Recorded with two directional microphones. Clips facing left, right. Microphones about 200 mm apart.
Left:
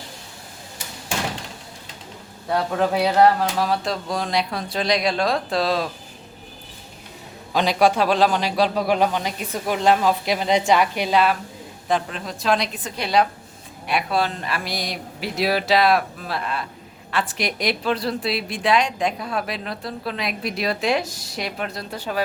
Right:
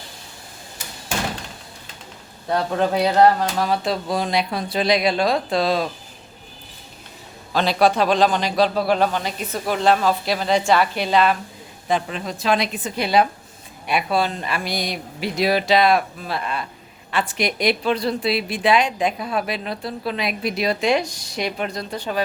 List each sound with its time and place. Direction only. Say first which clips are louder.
2.5 s a woman's voice: right 1 dB; 5° left (ahead or behind)
7.5 s a man's voice: even; 15° left (ahead or behind)